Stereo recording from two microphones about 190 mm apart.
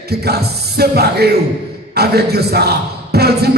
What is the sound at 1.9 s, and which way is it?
Speech, 55° right (ahead or behind).